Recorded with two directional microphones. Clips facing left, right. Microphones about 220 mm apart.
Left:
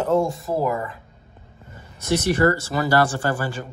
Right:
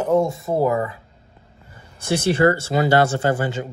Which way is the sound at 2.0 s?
30° right (ahead or behind).